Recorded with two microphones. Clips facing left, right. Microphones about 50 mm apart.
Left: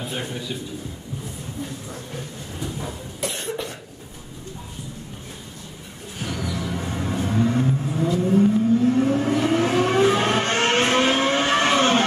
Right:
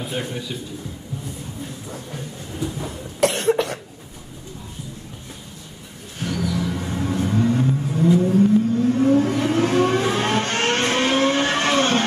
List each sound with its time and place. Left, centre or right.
0.1 s a man's voice: centre
3.2 s cough: right
6.2 s vehicle: centre